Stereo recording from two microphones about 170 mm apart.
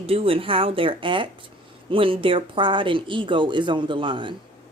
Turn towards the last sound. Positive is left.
turn(degrees=-30)  # may be behind; listen again after turning